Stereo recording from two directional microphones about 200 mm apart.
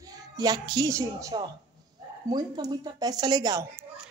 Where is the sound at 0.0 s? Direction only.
20° right (ahead or behind).